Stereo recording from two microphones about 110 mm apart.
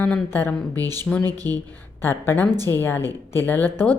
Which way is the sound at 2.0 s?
20° left (ahead or behind).